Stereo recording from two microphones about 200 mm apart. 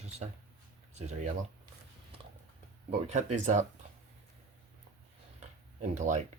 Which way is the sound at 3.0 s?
35° right (ahead or behind).